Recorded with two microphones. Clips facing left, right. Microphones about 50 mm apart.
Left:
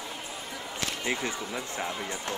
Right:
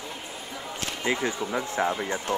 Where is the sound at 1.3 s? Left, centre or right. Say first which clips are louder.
Right 5 dB; right.